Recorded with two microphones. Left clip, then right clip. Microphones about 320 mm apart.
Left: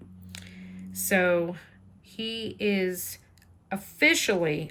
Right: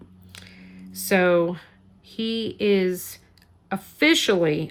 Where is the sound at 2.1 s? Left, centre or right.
Centre.